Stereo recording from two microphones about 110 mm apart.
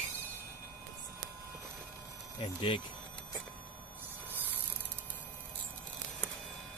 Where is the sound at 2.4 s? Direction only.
50° left (ahead or behind).